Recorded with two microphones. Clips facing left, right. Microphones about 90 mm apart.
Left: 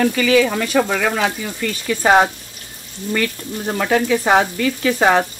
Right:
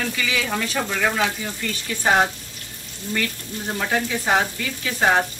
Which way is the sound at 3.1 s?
85° left.